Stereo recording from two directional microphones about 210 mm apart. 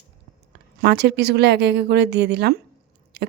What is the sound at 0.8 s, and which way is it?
Speech, 50° right (ahead or behind).